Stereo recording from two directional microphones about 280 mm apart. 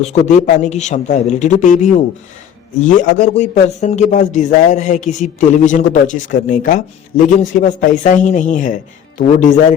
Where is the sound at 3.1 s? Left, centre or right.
Left.